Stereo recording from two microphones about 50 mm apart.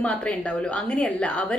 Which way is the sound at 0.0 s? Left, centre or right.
Left.